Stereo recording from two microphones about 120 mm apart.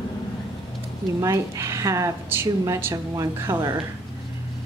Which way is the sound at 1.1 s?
25° right (ahead or behind).